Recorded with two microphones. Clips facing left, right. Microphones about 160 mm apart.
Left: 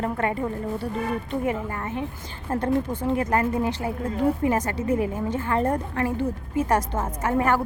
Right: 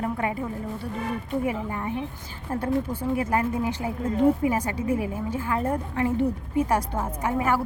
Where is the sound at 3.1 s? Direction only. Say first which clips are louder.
Left 2 dB; 5° right (ahead or behind).